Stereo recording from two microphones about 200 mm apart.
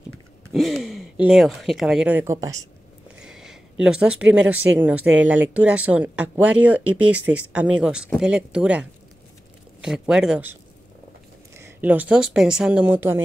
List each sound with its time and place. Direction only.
0.5 s speech: centre (ahead or behind); by 2.6 s 15° right (ahead or behind)
3.2 s a sound: 5° right (ahead or behind)
4.7 s speech: 5° right (ahead or behind)